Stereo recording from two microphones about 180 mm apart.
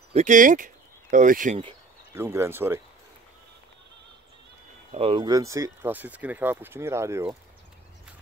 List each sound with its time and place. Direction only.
0.1 s speech: 45° right (ahead or behind)
2.1 s speech: 15° right (ahead or behind)
4.9 s speech: 30° right (ahead or behind); by 7.3 s 15° right (ahead or behind)